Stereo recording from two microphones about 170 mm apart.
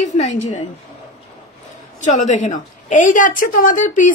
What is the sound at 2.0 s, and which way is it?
A woman's voice, 50° left (ahead or behind).